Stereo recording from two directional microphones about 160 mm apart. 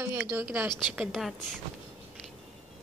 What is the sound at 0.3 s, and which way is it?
Speech, 10° right (ahead or behind).